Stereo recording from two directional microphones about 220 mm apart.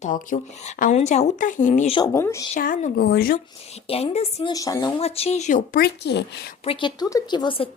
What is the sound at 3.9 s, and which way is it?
Speech, 30° left (ahead or behind).